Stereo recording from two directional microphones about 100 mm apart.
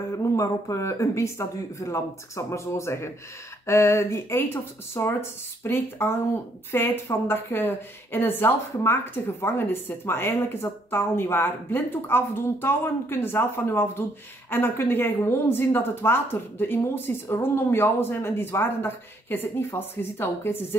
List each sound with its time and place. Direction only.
0.1 s a woman's voice: 30° left (ahead or behind)